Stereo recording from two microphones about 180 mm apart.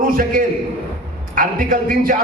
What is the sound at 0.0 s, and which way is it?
A man's voice, 50° right (ahead or behind).